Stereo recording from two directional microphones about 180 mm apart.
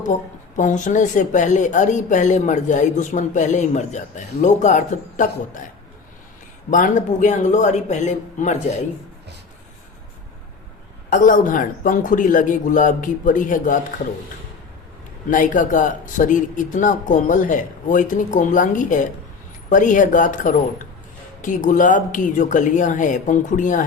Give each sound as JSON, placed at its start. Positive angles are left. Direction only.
{"t": 0.5, "sound": "speech", "side_deg": 45}
{"t": 6.7, "sound": "speech", "side_deg": 45}
{"t": 11.1, "sound": "speech", "side_deg": 45}
{"t": 15.3, "sound": "speech", "side_deg": 45}